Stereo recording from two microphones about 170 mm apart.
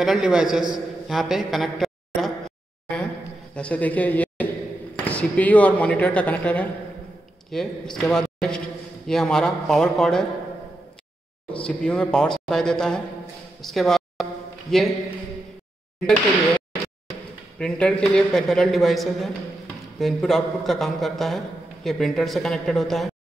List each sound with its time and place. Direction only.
0.0 s a man's voice: centre (ahead or behind)
3.5 s a man's voice: 5° left (ahead or behind)
11.5 s a man's voice: 5° left (ahead or behind)
13.6 s a sound: centre (ahead or behind)
14.7 s a man's voice: centre (ahead or behind)
16.1 s a sound: 10° left (ahead or behind)
17.6 s a man's voice: 5° left (ahead or behind)